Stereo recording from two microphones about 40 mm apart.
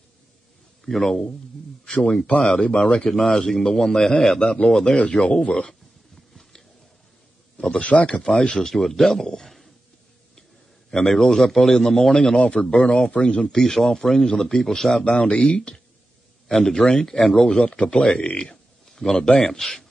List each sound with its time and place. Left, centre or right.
0.8 s a man's voice: centre
2.0 s speech: left
3.1 s a man's voice: centre; by 5.8 s left
7.5 s speech: left
7.8 s speech: left
8.3 s speech: left
8.6 s a man's voice: centre
10.9 s a man's voice: centre
13.7 s a man's voice: centre
15.0 s speech: left
16.4 s a man's voice: centre
17.6 s speech: left
18.9 s a sound: centre
19.4 s a man's voice: centre